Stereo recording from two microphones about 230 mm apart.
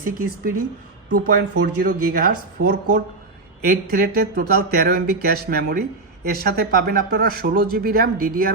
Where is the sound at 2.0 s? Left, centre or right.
Right.